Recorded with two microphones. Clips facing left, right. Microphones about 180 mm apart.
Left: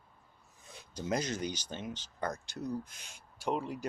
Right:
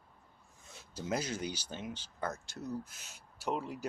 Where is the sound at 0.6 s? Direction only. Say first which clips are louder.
Left 2 dB; centre (ahead or behind).